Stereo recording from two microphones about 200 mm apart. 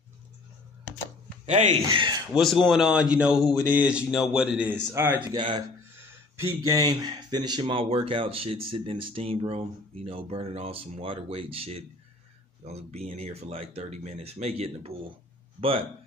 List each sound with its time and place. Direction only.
1.4 s speech: 35° right (ahead or behind)
2.3 s a man's voice: centre (ahead or behind)
5.3 s speech: 25° right (ahead or behind)